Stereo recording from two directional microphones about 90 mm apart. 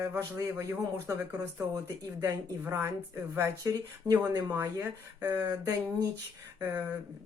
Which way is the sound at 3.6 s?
40° right (ahead or behind).